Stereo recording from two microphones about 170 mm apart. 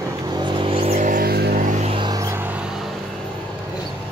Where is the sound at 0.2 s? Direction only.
25° right (ahead or behind); by 1.9 s 50° right (ahead or behind).